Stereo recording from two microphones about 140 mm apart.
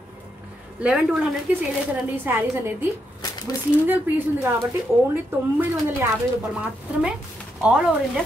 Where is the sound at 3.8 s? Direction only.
15° right (ahead or behind).